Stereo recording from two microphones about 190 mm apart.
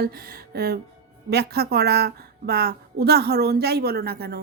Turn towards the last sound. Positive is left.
turn(degrees=-55)  # may be behind; listen again after turning